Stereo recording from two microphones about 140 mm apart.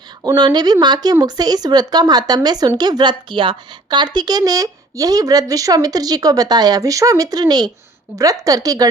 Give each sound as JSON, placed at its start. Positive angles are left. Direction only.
{"t": 0.2, "sound": "speech", "side_deg": -25}